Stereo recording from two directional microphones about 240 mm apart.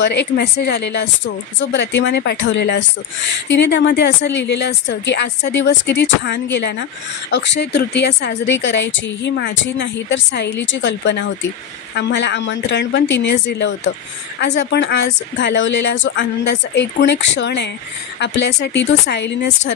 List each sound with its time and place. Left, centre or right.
0.0 s a woman's voice: left